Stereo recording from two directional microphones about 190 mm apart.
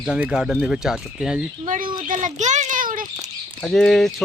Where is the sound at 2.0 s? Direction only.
40° right (ahead or behind).